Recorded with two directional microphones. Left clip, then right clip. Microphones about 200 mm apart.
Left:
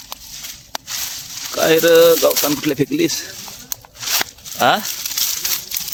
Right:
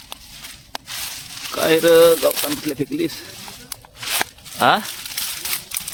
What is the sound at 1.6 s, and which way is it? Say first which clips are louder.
Speech: left 2 dB; 15° left (ahead or behind).